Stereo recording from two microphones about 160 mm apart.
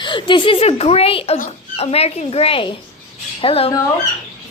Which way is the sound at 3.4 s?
35° left (ahead or behind).